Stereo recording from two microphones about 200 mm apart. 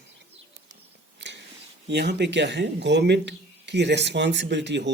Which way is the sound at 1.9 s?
55° right (ahead or behind).